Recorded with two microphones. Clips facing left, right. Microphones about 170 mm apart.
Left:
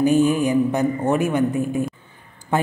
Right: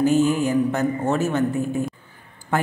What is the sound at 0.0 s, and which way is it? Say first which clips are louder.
A man's voice: left 2 dB; 15° left (ahead or behind).